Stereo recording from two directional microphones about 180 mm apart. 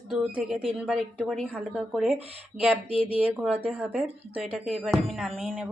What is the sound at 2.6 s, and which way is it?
Speech, 10° right (ahead or behind).